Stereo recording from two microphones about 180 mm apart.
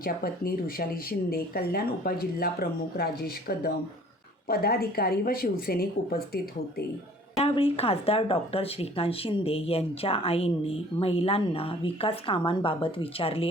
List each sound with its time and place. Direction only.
0.0 s speech: 55° left (ahead or behind)
7.3 s speech: 35° left (ahead or behind)